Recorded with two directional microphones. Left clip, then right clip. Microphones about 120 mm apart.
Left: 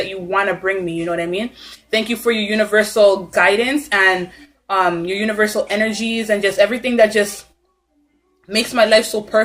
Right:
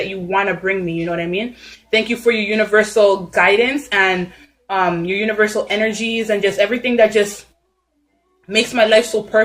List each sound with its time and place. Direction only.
0.0 s a woman's voice: 20° left (ahead or behind)
8.4 s a woman's voice: 20° left (ahead or behind)